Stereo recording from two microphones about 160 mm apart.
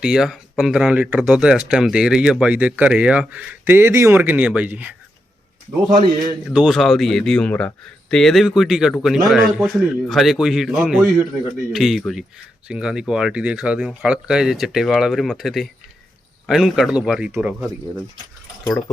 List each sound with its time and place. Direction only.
0.0 s speech: 5° right (ahead or behind)
5.9 s a man's voice: 25° right (ahead or behind)
6.5 s speech: centre (ahead or behind)